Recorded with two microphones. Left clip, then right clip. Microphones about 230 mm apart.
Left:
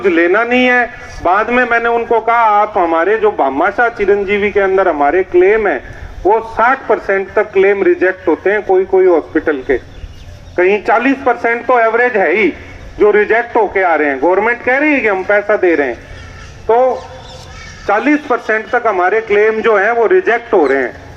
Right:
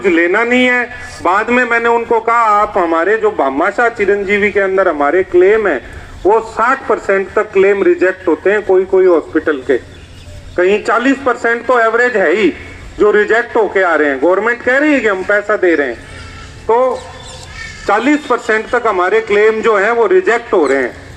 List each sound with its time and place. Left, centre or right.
0.0 s a man's voice: right